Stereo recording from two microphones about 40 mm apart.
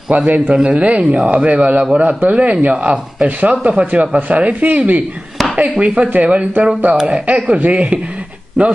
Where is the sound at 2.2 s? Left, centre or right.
Right.